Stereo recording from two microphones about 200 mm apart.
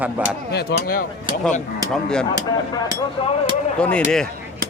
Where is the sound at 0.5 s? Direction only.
50° left (ahead or behind).